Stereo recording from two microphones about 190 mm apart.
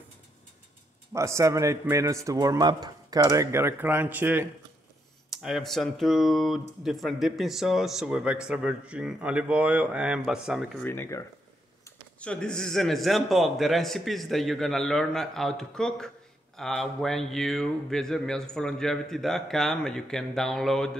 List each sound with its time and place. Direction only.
1.1 s a man's voice: 15° right (ahead or behind)
10.8 s speech: 10° left (ahead or behind)